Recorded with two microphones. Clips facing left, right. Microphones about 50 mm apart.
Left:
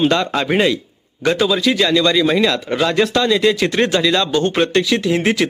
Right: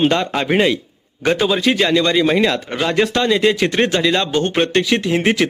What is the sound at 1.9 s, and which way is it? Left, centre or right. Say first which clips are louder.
A man's voice: even; right.